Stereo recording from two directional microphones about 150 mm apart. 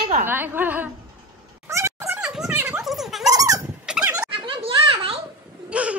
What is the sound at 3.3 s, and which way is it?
Dog, 25° right (ahead or behind).